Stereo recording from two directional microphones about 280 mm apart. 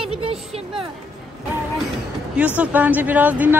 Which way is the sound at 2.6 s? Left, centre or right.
Centre.